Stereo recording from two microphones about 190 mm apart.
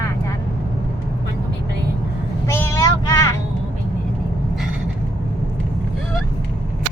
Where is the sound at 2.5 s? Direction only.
15° left (ahead or behind).